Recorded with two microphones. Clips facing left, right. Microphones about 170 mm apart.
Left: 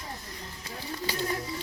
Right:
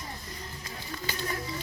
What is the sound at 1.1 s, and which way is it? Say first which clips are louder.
Bird: left 5 dB; 35° left (ahead or behind).